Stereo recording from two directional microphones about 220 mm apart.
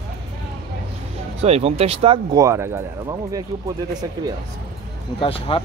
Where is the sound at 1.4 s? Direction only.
30° right (ahead or behind).